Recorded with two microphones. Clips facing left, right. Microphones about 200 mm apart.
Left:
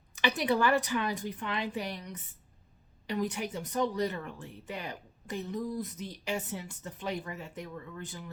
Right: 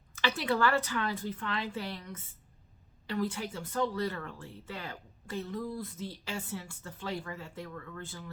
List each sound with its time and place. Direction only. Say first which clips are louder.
0.2 s speech: left 2 dB; 15° left (ahead or behind)